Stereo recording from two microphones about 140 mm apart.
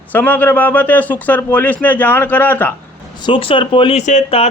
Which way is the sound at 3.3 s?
40° left (ahead or behind).